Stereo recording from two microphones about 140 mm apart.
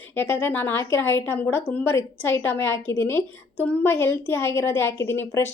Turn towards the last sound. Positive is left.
turn(degrees=20)  # may be behind; listen again after turning